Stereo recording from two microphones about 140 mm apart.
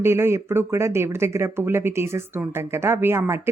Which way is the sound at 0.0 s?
20° right (ahead or behind).